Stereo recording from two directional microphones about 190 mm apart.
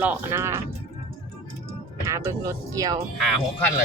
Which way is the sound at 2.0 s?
15° right (ahead or behind).